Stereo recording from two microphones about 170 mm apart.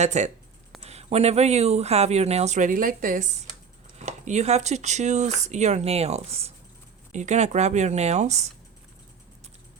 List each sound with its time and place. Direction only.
0.0 s speech: 45° right (ahead or behind)